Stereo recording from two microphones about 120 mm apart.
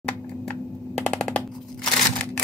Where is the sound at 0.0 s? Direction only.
10° left (ahead or behind).